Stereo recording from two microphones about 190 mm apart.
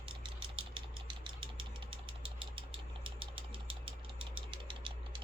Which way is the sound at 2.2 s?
30° right (ahead or behind).